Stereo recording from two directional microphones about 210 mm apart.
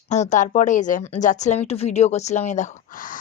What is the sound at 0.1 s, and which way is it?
A woman's voice, 35° left (ahead or behind).